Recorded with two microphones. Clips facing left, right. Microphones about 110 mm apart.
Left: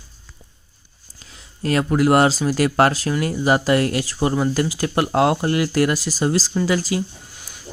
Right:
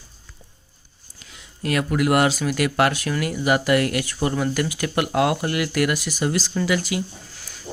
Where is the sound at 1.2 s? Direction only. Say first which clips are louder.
Left 3 dB; 35° left (ahead or behind).